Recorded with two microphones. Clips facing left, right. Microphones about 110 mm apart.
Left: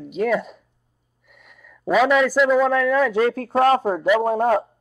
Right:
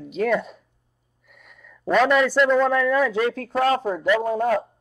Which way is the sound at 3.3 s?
40° left (ahead or behind).